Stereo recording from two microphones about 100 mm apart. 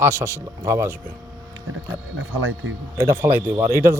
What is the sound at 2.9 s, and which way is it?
Speech, 30° right (ahead or behind).